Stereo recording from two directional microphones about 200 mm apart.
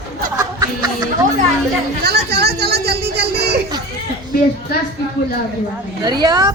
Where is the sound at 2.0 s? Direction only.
55° right (ahead or behind).